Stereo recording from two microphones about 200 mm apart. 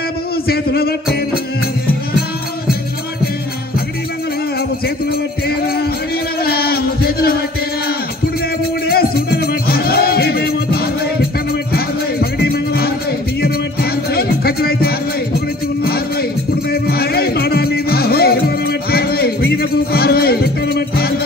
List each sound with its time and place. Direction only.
0.5 s speech: 50° left (ahead or behind)
6.4 s a sound: 50° left (ahead or behind)
8.8 s music: 50° left (ahead or behind)